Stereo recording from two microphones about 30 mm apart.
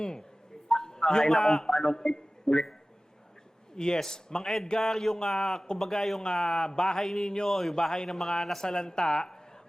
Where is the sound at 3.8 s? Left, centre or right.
Left.